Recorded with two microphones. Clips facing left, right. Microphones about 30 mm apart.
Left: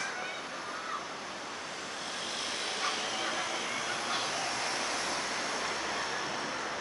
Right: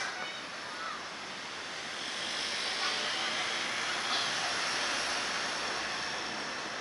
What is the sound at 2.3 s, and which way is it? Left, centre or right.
Vehicle, right.